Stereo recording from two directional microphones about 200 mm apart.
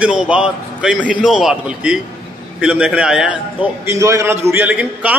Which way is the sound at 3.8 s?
15° right (ahead or behind).